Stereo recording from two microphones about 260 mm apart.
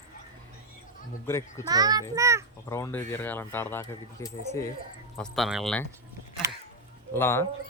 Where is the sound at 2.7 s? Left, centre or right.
Centre.